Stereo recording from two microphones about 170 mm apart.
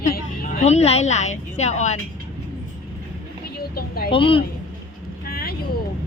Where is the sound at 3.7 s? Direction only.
60° left (ahead or behind).